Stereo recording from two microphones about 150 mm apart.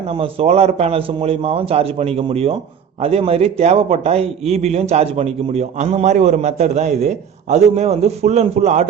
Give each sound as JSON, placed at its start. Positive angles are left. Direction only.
{"t": 0.1, "sound": "a man's voice", "side_deg": -40}